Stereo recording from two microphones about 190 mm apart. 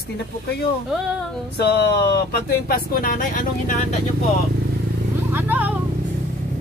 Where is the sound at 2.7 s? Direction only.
50° left (ahead or behind).